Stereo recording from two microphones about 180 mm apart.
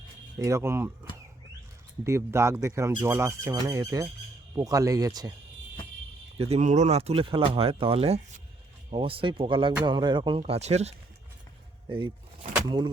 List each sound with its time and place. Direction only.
0.3 s speech: 15° right (ahead or behind)
2.0 s speech: 15° right (ahead or behind)
6.4 s speech: 40° right (ahead or behind)
11.9 s a sound: 30° right (ahead or behind)